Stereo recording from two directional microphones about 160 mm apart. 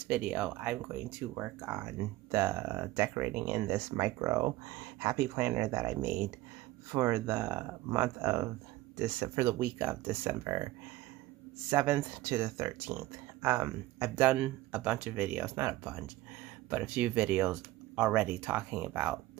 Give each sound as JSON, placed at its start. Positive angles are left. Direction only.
{"t": 0.1, "sound": "speech", "side_deg": -5}
{"t": 11.7, "sound": "speech", "side_deg": -15}